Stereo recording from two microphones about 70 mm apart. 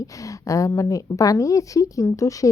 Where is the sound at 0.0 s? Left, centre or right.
Left.